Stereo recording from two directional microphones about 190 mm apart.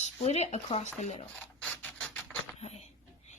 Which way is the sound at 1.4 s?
5° left (ahead or behind).